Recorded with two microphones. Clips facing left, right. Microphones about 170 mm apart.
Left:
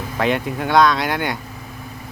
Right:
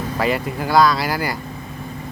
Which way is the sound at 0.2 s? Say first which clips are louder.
Left 2 dB; centre (ahead or behind).